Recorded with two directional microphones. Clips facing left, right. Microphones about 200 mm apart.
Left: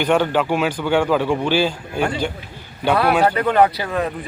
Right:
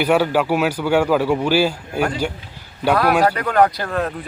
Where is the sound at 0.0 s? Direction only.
10° right (ahead or behind).